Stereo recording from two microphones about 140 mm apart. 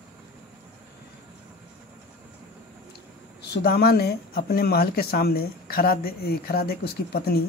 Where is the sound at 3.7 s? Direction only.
90° left.